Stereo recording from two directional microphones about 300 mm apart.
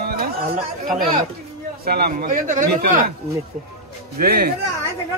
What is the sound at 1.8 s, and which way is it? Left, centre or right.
A man's voice, right.